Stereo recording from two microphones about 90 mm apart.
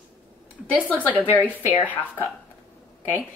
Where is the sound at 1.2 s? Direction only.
20° right (ahead or behind).